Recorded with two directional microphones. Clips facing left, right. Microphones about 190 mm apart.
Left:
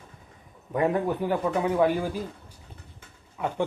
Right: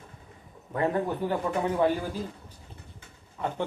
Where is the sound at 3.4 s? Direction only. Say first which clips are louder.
Left 2 dB; 5° left (ahead or behind).